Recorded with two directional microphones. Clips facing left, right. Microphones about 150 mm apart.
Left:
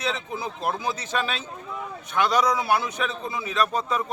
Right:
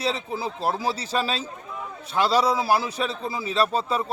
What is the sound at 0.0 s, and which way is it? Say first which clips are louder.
A man's voice: right 2 dB; 35° right (ahead or behind).